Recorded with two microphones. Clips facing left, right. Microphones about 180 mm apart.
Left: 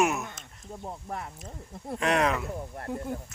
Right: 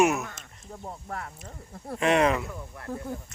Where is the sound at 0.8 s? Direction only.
15° left (ahead or behind).